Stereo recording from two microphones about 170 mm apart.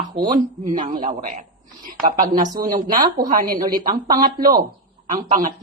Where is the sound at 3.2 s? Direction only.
55° right (ahead or behind).